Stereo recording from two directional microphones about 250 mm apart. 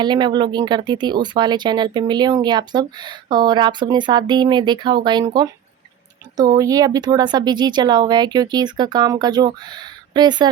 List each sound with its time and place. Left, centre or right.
0.0 s speech: centre